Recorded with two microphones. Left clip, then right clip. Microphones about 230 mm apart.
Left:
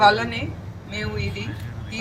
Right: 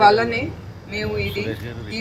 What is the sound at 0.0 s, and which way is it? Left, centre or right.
A man's voice, right.